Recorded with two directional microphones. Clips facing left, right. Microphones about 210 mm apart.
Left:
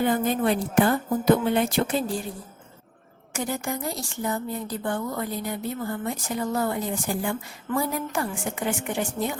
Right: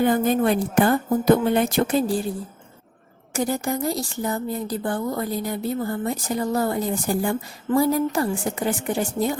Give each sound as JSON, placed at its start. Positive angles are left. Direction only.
{"t": 0.0, "sound": "speech", "side_deg": -45}
{"t": 3.3, "sound": "a woman's voice", "side_deg": -40}